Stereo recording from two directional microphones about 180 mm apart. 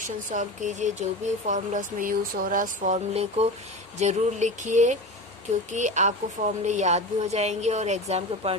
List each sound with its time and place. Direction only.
0.0 s a woman's voice: 45° right (ahead or behind)